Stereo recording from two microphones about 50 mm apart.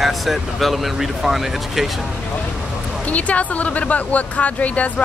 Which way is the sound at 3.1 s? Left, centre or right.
Left.